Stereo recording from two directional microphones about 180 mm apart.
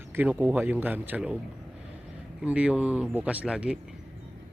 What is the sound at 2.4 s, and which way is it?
Speech, 5° right (ahead or behind).